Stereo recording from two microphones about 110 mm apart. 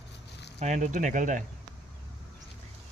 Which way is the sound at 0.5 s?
90° right.